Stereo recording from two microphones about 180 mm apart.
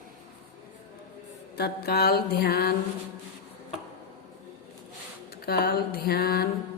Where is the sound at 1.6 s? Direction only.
60° left (ahead or behind).